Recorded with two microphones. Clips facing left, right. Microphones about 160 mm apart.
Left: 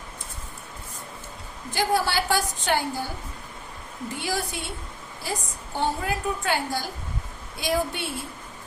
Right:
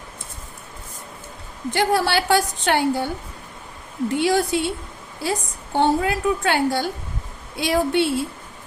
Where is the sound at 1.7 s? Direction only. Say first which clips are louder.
Right 4 dB; 70° right (ahead or behind).